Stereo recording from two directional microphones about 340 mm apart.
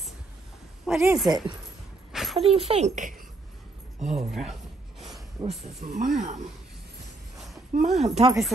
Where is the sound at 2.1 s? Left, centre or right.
Centre.